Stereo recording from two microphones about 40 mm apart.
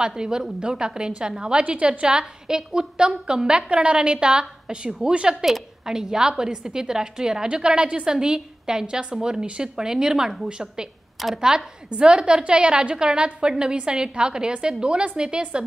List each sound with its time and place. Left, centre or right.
0.0 s a woman's voice: centre
5.3 s a woman's voice: centre
11.3 s a woman's voice: centre